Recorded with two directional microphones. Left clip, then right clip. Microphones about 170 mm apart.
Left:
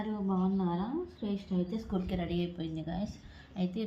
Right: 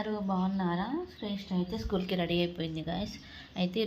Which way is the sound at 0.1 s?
25° right (ahead or behind).